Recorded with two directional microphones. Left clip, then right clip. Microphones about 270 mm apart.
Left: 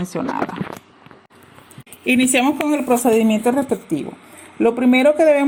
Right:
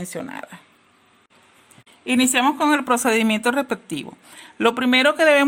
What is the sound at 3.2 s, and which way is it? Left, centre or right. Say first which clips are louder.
Speech: left 3 dB; right.